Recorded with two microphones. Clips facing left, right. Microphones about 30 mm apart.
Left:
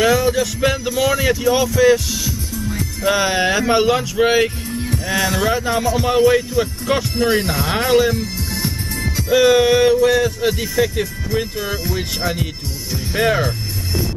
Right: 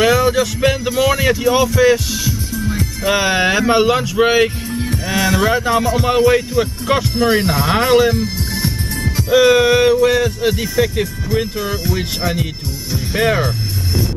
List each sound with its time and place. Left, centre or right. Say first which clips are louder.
0.0 s speech: right 2 dB; centre
2.7 s music: right 2 dB; right
3.1 s speech: right 2 dB; centre
9.3 s speech: right 2 dB; centre